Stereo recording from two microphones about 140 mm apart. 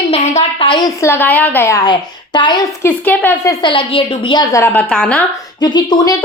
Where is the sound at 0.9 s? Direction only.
15° left (ahead or behind); by 2.7 s 30° left (ahead or behind).